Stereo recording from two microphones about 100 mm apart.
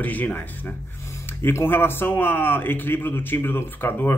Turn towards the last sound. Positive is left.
turn(degrees=20)  # may be behind; listen again after turning